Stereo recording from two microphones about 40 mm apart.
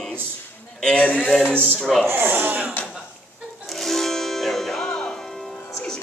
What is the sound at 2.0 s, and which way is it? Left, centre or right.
Speech, right.